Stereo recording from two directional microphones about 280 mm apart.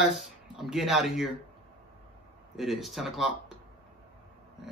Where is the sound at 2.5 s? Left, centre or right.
Centre.